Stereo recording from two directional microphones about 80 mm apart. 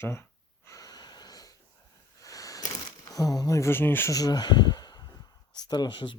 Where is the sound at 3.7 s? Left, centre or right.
Left.